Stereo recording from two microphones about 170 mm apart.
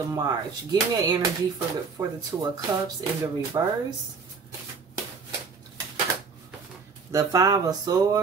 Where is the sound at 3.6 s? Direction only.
25° right (ahead or behind).